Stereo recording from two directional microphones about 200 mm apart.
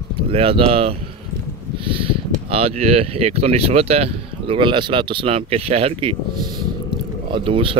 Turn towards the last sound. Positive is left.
turn(degrees=-25)  # may be behind; listen again after turning